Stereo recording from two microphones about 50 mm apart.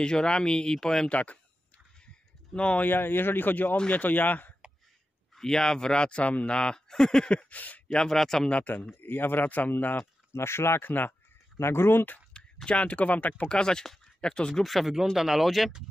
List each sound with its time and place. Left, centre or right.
0.0 s speech: centre
1.1 s speech: left
2.5 s speech: left
2.8 s a man's voice: left
5.3 s speech: centre; by 7.8 s left
7.9 s speech: centre
8.5 s speech: left
8.9 s a man's voice: left
9.9 s speech: left
10.8 s speech: left
11.5 s speech: left
12.6 s speech: left
13.5 s speech: centre
14.5 s speech: centre